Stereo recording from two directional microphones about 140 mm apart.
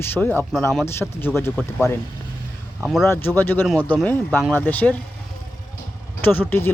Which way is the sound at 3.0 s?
15° left (ahead or behind).